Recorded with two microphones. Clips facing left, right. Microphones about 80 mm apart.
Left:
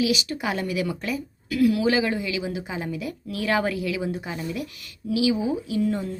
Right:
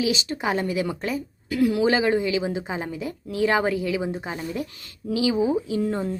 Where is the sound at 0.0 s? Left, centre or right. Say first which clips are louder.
Even; right.